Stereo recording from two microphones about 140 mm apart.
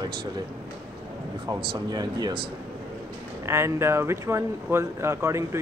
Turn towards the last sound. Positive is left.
turn(degrees=-20)  # may be behind; listen again after turning